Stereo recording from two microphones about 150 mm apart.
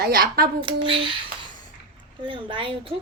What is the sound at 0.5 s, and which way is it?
Speech, 35° right (ahead or behind).